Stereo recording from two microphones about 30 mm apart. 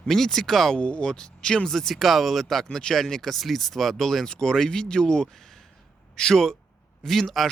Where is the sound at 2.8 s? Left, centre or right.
Centre.